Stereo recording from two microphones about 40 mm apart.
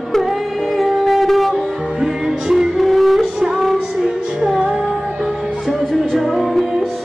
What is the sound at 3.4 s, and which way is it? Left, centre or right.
Music, centre.